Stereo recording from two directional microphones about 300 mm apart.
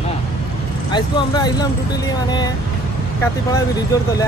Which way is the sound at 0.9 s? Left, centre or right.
Centre.